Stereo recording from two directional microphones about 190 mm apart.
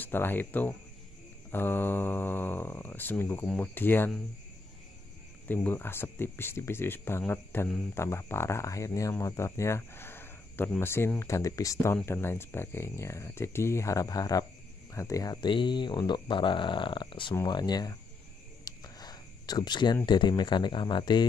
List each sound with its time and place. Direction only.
0.0 s speech: 10° left (ahead or behind)
5.5 s speech: 10° left (ahead or behind)
18.6 s whispering: 20° left (ahead or behind)
20.1 s speech: 25° left (ahead or behind)